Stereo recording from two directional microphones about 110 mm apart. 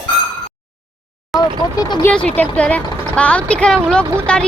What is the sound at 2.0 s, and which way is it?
A woman's voice, 10° left (ahead or behind).